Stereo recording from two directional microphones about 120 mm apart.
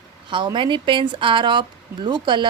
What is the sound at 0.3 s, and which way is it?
Speech, 40° right (ahead or behind).